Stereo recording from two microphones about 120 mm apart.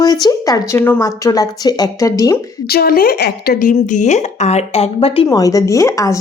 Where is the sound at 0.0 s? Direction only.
30° left (ahead or behind).